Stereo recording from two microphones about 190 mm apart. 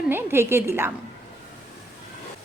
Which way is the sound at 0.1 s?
10° right (ahead or behind).